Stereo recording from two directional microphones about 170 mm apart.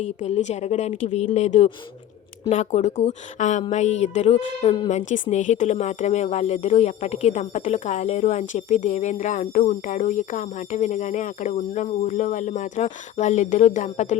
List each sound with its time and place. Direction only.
0.0 s speech: 40° left (ahead or behind)
4.6 s speech: 30° left (ahead or behind)
4.9 s speech: 45° left (ahead or behind)